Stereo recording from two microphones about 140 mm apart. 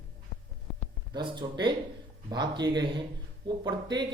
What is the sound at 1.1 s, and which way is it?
Speech, 35° right (ahead or behind).